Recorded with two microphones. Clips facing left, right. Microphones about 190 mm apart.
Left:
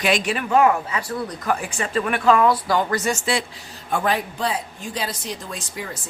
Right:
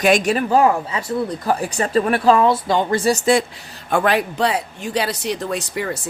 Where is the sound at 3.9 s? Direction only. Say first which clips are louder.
Right 5 dB; 75° right (ahead or behind).